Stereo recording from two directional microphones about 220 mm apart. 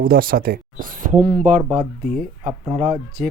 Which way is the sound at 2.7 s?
25° right (ahead or behind).